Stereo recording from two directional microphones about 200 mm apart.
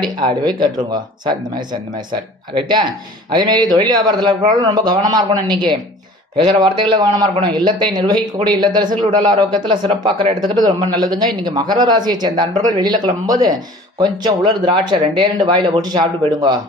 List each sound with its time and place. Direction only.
0.0 s speech: 20° right (ahead or behind)
2.5 s speech: 25° right (ahead or behind)